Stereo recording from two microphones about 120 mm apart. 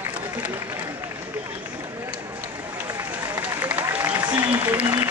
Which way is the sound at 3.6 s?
15° right (ahead or behind).